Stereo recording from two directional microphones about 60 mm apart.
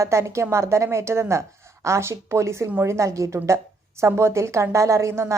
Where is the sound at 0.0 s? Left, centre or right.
Right.